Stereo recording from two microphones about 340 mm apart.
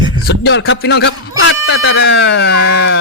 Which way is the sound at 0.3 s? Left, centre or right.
Left.